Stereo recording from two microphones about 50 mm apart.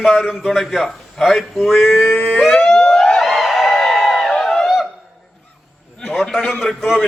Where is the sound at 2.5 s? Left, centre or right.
Centre.